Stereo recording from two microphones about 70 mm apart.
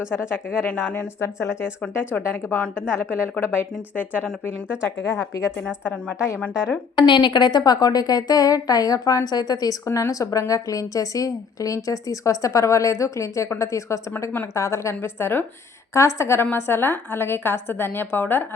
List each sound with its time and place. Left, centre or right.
0.1 s a woman's voice: left
0.7 s speech: centre
1.2 s a woman's voice: left
2.1 s speech: centre
2.9 s a woman's voice: left
5.1 s a woman's voice: left
7.0 s a woman's voice: left
9.8 s a woman's voice: left
16.0 s a woman's voice: left